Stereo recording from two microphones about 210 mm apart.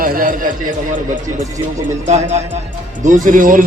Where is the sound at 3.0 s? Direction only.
40° right (ahead or behind).